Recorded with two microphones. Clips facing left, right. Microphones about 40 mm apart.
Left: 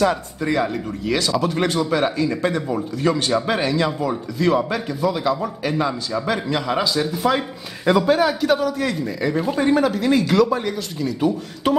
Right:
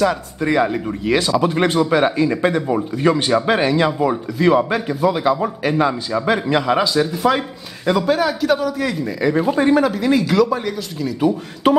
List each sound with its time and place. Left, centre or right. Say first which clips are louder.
0.4 s a man's voice: right 7 dB; centre